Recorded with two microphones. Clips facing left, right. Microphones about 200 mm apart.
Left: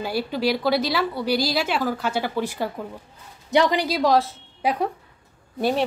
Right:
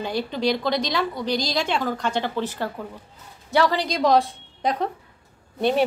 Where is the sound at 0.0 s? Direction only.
5° left (ahead or behind).